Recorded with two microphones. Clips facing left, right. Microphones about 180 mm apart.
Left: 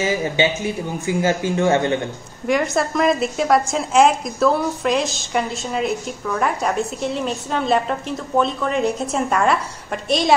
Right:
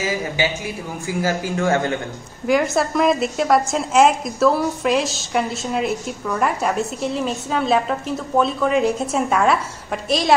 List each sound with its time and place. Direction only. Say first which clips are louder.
0.4 s a man's voice: left 4 dB; 25° left (ahead or behind)
2.4 s a woman's voice: right 1 dB; centre (ahead or behind)